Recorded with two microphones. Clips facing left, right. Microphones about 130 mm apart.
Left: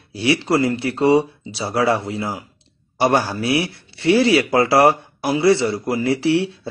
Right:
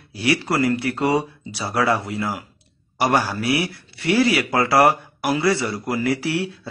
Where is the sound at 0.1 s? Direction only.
25° left (ahead or behind).